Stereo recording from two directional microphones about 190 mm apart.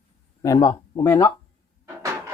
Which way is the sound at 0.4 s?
20° left (ahead or behind).